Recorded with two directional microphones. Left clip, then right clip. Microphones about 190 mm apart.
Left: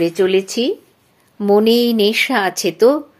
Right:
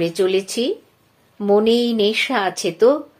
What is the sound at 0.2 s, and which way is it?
Speech, 30° left (ahead or behind).